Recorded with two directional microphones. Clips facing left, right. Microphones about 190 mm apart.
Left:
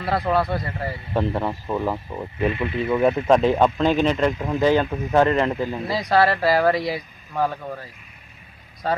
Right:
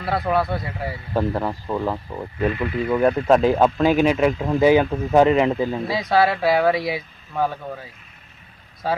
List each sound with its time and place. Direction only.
0.3 s speech: centre (ahead or behind)
2.3 s speech: 20° left (ahead or behind)
3.3 s speech: centre (ahead or behind); by 5.9 s 20° right (ahead or behind)
5.9 s speech: centre (ahead or behind)